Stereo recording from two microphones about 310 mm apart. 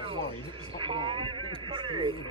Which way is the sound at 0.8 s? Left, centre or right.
Centre.